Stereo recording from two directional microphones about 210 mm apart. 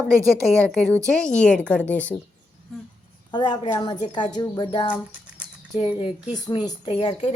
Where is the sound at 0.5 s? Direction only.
5° left (ahead or behind).